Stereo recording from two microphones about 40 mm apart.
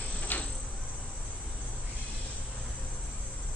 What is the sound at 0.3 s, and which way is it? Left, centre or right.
Cricket, left.